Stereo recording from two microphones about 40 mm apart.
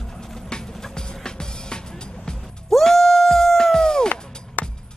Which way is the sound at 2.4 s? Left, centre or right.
Centre.